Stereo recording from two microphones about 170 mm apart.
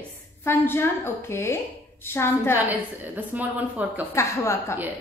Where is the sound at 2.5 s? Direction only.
10° right (ahead or behind).